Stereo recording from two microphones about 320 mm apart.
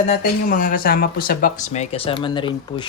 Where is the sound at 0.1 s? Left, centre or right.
Left.